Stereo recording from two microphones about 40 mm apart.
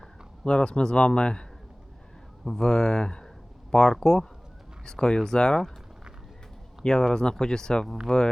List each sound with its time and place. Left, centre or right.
0.4 s speech: left
2.6 s speech: centre
7.1 s speech: centre